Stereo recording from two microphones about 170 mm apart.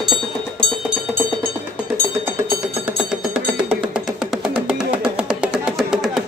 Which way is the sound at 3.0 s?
5° right (ahead or behind).